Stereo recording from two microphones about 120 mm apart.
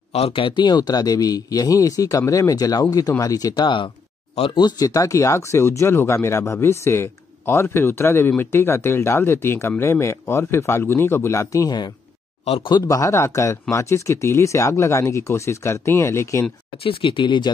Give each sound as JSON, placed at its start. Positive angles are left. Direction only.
{"t": 0.1, "sound": "speech", "side_deg": 55}
{"t": 16.8, "sound": "speech", "side_deg": 45}